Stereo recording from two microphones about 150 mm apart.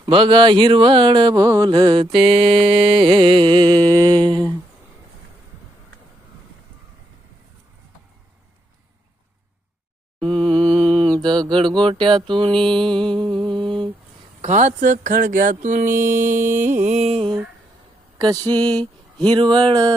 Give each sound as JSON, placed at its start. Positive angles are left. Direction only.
{"t": 0.0, "sound": "speech", "side_deg": -35}
{"t": 3.7, "sound": "music", "side_deg": 10}
{"t": 4.2, "sound": "speech", "side_deg": -30}
{"t": 10.2, "sound": "mantra", "side_deg": -35}
{"t": 11.8, "sound": "speech", "side_deg": -35}
{"t": 12.5, "sound": "mantra", "side_deg": 5}
{"t": 12.8, "sound": "speech", "side_deg": -35}
{"t": 13.4, "sound": "mantra", "side_deg": -35}
{"t": 14.4, "sound": "speech", "side_deg": -55}
{"t": 16.7, "sound": "music", "side_deg": -50}
{"t": 18.2, "sound": "mantra", "side_deg": -25}
{"t": 18.5, "sound": "speech", "side_deg": -25}